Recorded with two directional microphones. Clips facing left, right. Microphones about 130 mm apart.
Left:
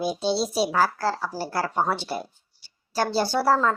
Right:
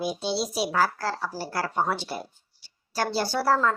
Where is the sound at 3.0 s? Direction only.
25° left (ahead or behind).